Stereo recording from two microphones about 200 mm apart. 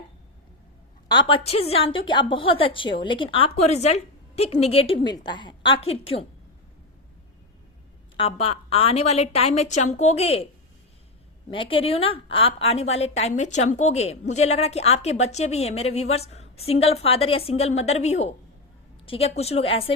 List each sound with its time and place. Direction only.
1.0 s a woman's voice: 25° left (ahead or behind)
8.1 s a woman's voice: 30° left (ahead or behind)
11.5 s a woman's voice: 25° left (ahead or behind)